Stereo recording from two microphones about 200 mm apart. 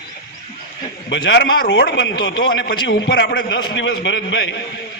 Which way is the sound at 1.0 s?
60° left (ahead or behind).